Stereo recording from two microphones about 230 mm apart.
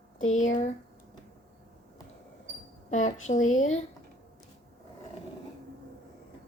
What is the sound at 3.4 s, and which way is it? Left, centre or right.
Speech, left.